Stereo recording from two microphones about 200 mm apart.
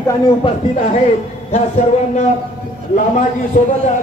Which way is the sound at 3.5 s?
45° left (ahead or behind).